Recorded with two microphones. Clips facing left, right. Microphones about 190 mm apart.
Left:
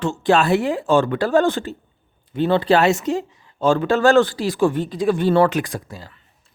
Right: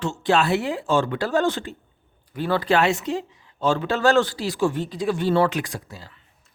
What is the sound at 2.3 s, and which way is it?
Speech, 25° left (ahead or behind).